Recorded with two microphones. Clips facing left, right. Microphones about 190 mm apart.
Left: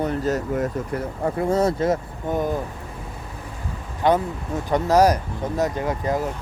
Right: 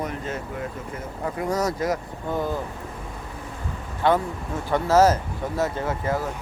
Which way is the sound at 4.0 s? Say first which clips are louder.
Left 2 dB; 20° left (ahead or behind).